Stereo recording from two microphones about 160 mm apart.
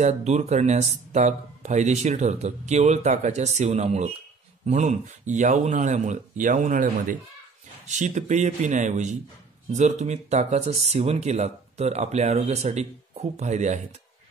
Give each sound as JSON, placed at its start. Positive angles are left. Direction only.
{"t": 0.0, "sound": "speech", "side_deg": -45}